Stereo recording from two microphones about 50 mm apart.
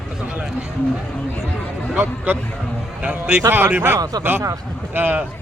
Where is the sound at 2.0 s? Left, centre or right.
Right.